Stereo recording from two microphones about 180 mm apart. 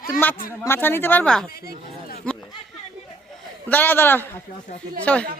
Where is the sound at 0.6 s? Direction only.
10° left (ahead or behind).